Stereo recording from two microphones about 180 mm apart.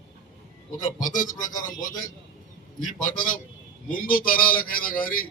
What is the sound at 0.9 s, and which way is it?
Speech, 45° left (ahead or behind).